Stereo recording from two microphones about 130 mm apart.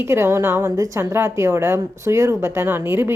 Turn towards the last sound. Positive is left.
turn(degrees=-15)  # may be behind; listen again after turning